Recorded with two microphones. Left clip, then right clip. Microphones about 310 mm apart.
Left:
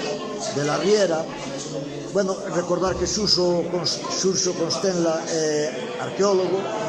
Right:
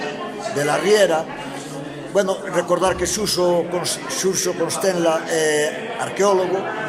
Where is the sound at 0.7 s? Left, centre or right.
Right.